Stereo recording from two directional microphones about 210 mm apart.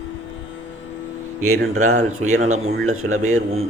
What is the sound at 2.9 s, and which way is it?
Speech, 85° right.